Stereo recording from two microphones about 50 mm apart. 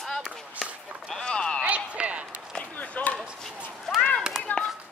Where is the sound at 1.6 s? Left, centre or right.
Right.